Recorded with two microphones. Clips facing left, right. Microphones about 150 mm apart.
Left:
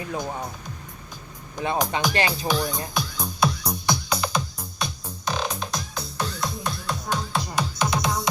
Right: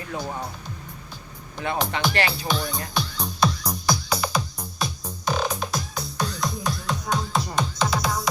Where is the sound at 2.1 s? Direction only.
20° left (ahead or behind).